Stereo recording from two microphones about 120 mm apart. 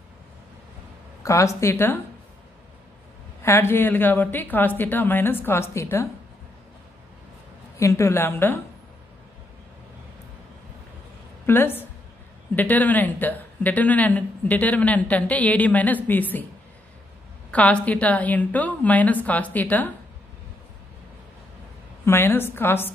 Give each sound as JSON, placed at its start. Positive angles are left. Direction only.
{"t": 1.2, "sound": "a woman's voice", "side_deg": 25}
{"t": 3.4, "sound": "speech", "side_deg": 20}
{"t": 7.8, "sound": "a woman's voice", "side_deg": 20}
{"t": 11.4, "sound": "speech", "side_deg": 20}
{"t": 17.5, "sound": "speech", "side_deg": 10}
{"t": 22.0, "sound": "a woman's voice", "side_deg": 20}